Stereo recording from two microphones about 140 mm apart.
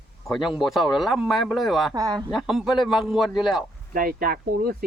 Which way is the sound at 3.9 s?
90° right.